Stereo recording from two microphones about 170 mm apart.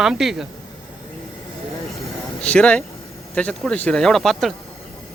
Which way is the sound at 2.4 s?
5° left (ahead or behind).